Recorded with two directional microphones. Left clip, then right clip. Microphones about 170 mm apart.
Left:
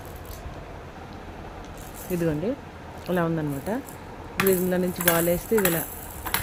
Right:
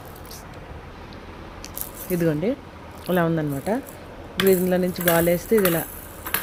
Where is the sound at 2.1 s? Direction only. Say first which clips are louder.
Right 4 dB; 25° right (ahead or behind).